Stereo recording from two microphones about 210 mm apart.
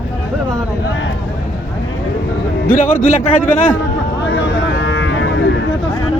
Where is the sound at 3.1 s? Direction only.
35° left (ahead or behind).